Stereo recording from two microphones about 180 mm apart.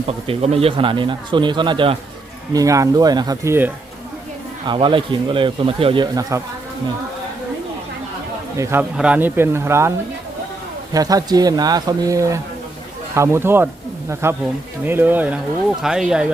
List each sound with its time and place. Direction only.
0.3 s speech: 35° right (ahead or behind); by 3.7 s 15° right (ahead or behind)
4.6 s speech: 25° right (ahead or behind)
8.5 s speech: 15° right (ahead or behind)
10.9 s speech: 20° right (ahead or behind); by 16.2 s 5° right (ahead or behind)